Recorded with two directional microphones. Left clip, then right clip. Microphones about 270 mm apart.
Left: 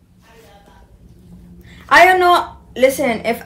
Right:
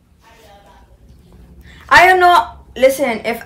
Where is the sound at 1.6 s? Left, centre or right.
Centre.